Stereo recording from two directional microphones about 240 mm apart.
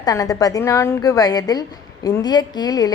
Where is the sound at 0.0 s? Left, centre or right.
Centre.